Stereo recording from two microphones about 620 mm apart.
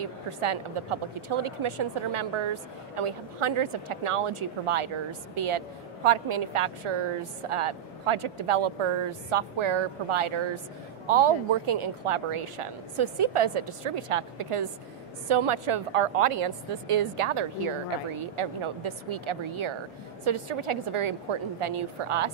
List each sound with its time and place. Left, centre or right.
0.0 s a woman's voice: right